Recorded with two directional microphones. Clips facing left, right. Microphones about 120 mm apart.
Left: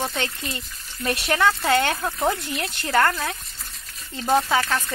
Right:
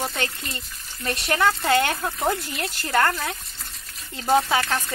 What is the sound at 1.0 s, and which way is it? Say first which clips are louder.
Speech: left 1 dB; 5° left (ahead or behind).